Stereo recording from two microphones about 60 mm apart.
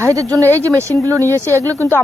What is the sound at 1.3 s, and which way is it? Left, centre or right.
Speech, right.